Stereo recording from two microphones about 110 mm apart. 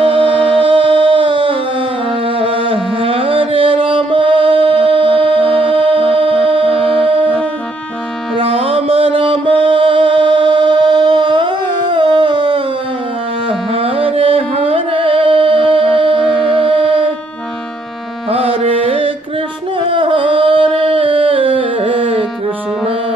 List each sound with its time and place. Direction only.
0.1 s music: 50° right (ahead or behind)
8.4 s music: 60° right (ahead or behind)
13.7 s music: 55° right (ahead or behind)
18.3 s music: 60° right (ahead or behind)
19.9 s a sound: 50° right (ahead or behind)